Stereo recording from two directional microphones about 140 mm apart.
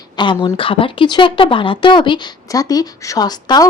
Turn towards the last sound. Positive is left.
turn(degrees=30)  # may be behind; listen again after turning